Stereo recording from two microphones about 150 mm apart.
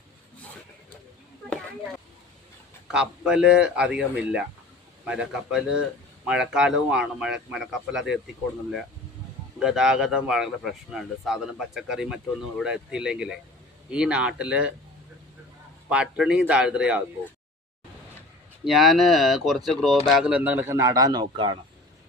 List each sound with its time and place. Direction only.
2.8 s speech: 5° right (ahead or behind)
9.6 s speech: 5° right (ahead or behind)
15.9 s speech: 5° right (ahead or behind)
18.6 s speech: centre (ahead or behind); by 21.6 s 35° right (ahead or behind)